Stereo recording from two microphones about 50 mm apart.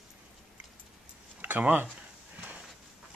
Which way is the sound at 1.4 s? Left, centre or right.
Right.